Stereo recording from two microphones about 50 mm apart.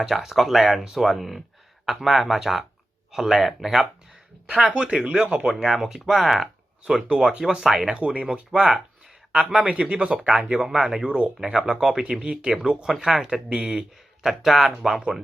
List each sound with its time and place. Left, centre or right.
0.0 s speech: centre
4.5 s speech: centre
5.5 s speech: centre
6.8 s speech: centre
7.9 s speech: right
10.6 s speech: centre